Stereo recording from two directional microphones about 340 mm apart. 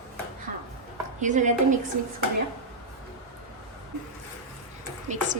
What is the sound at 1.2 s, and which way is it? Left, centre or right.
Speech, right.